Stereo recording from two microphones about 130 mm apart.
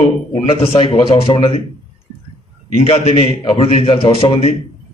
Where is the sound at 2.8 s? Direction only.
55° left (ahead or behind).